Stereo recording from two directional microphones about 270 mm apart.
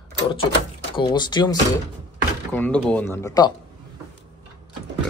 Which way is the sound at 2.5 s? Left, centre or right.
Centre.